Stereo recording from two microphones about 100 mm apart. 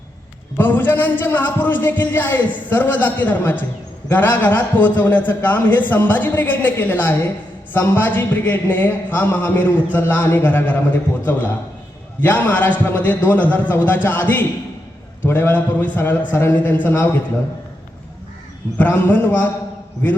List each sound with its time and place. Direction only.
0.5 s a man's voice: 20° left (ahead or behind)
12.2 s a man's voice: 15° left (ahead or behind)
18.8 s a man's voice: 20° left (ahead or behind)